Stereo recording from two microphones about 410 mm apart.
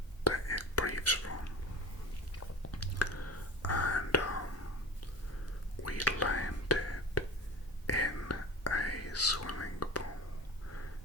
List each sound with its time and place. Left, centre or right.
0.3 s whispering: left
2.7 s whispering: left
5.8 s whispering: left